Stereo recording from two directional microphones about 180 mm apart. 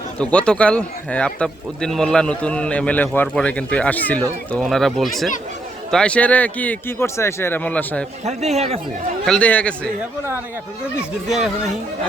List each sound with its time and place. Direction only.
0.2 s a man's voice: 5° left (ahead or behind)
8.2 s speech: 40° right (ahead or behind)
9.2 s a man's voice: 5° left (ahead or behind)
11.3 s speech: centre (ahead or behind)